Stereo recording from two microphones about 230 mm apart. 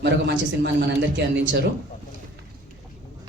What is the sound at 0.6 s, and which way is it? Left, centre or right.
Speech, right.